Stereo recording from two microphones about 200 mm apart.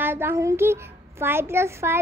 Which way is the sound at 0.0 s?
10° right (ahead or behind).